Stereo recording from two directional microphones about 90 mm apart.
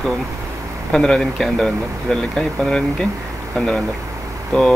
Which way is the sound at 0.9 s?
5° left (ahead or behind).